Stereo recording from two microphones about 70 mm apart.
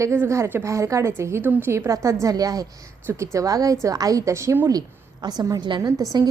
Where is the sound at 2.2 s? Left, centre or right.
Right.